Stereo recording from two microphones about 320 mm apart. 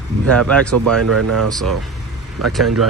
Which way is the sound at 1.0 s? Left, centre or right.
Right.